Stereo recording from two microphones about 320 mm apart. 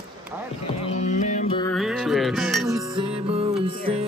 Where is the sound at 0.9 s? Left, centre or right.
Left.